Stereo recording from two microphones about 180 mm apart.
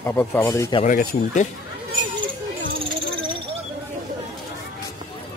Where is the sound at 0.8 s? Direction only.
45° left (ahead or behind).